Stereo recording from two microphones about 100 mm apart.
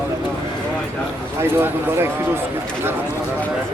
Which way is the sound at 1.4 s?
25° right (ahead or behind).